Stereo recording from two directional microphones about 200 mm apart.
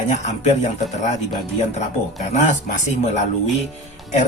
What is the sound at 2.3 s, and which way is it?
Speech, 35° left (ahead or behind).